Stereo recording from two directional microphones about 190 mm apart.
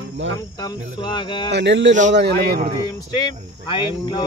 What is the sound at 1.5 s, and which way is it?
Speech, 65° right (ahead or behind).